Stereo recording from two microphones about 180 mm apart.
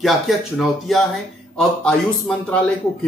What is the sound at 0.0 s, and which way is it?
Speech, centre (ahead or behind).